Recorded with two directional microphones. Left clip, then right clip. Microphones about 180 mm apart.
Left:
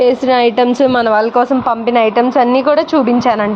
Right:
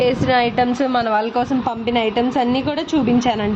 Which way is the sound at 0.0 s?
25° left (ahead or behind).